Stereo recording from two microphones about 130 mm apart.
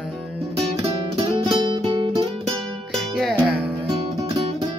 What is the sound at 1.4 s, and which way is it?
Music, 35° right (ahead or behind).